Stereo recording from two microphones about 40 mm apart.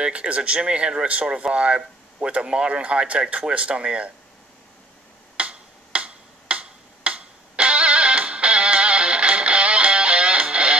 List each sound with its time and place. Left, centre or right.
0.0 s speech: right
5.4 s tick-tock: right